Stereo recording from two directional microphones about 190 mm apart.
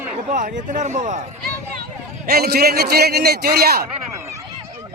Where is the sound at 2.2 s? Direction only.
55° right (ahead or behind).